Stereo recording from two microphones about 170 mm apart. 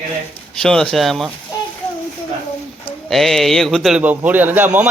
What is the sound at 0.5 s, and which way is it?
Speech, 5° left (ahead or behind).